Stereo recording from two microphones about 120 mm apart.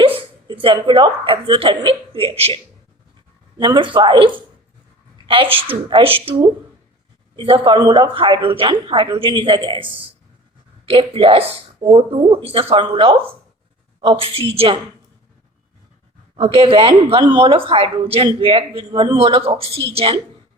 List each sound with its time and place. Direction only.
0.2 s speech: 45° right (ahead or behind)
3.6 s a woman's voice: 40° right (ahead or behind)
7.3 s a woman's voice: 45° right (ahead or behind)
16.3 s a woman's voice: 50° right (ahead or behind)